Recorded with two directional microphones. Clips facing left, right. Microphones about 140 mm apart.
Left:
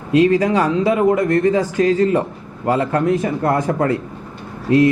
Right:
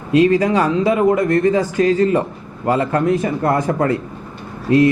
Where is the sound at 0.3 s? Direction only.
15° right (ahead or behind).